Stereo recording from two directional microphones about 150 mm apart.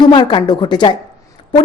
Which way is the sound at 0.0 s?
30° left (ahead or behind).